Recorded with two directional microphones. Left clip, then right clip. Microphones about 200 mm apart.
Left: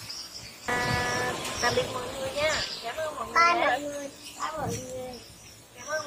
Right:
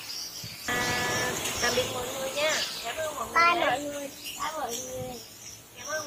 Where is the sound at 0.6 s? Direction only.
5° left (ahead or behind).